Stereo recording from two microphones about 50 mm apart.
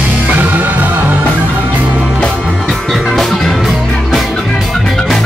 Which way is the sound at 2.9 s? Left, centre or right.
Centre.